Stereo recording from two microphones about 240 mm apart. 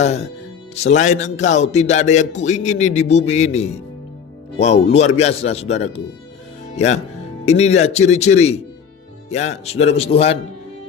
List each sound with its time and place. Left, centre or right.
0.0 s a man's voice: left